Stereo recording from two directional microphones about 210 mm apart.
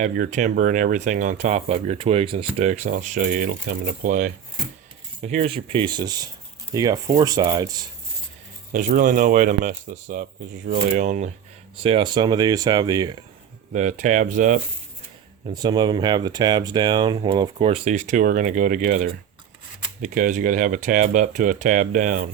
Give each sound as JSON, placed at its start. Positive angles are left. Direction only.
{"t": 0.0, "sound": "speech", "side_deg": -35}
{"t": 8.7, "sound": "speech", "side_deg": -40}
{"t": 11.8, "sound": "speech", "side_deg": -25}
{"t": 13.7, "sound": "speech", "side_deg": -35}
{"t": 15.5, "sound": "speech", "side_deg": -20}